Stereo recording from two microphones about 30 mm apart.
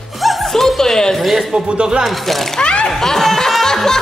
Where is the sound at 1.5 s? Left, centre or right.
Right.